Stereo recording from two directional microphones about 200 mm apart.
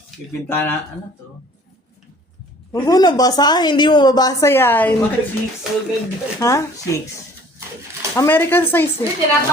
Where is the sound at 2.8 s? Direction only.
20° left (ahead or behind).